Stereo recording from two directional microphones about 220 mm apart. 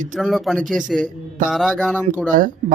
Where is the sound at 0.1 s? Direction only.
Centre (ahead or behind).